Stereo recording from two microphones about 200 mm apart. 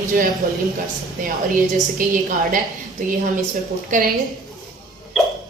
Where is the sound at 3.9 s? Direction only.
40° right (ahead or behind).